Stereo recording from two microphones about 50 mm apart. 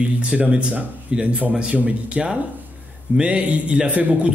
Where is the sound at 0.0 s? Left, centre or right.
Right.